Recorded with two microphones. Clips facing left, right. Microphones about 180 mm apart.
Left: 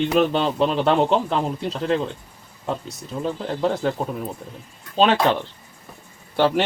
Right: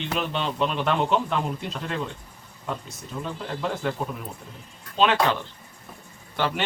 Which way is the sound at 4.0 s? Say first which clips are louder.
Left 5 dB; 30° left (ahead or behind).